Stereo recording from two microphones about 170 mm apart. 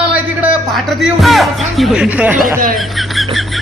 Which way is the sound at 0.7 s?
Centre (ahead or behind).